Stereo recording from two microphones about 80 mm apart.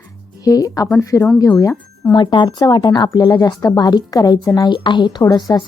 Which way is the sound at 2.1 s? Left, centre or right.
Left.